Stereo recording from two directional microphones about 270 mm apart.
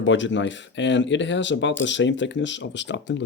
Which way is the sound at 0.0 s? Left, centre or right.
Left.